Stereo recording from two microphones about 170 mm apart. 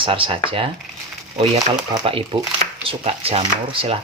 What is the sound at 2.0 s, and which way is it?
Speech, 30° right (ahead or behind).